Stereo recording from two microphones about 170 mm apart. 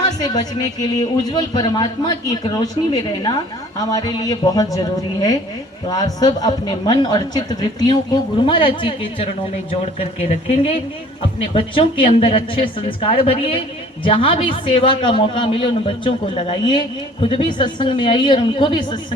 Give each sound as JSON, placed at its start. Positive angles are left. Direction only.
{"t": 0.2, "sound": "a woman's voice", "side_deg": 25}